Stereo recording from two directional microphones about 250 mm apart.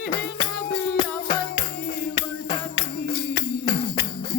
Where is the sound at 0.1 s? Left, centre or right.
Left.